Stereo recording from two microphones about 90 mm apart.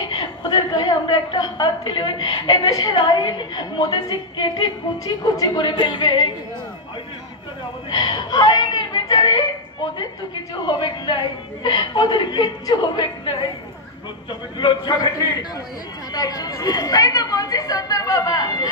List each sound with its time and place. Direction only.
0.1 s a woman's voice: 55° left (ahead or behind)
5.6 s a woman's voice: 55° left (ahead or behind)
7.9 s speech: 45° left (ahead or behind)
10.8 s a woman's voice: 60° left (ahead or behind)
14.6 s a woman's voice: 45° left (ahead or behind)